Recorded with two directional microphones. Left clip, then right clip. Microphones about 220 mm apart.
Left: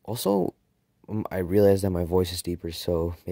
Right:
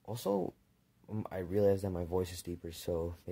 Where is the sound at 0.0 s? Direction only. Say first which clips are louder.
Left 10 dB; 40° left (ahead or behind).